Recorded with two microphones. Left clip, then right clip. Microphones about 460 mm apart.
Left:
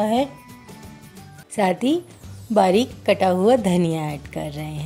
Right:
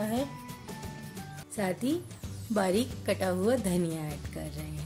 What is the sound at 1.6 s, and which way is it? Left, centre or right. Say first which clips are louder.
A woman's voice: left 12 dB; right.